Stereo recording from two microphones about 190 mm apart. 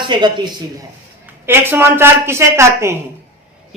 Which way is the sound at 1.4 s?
10° right (ahead or behind).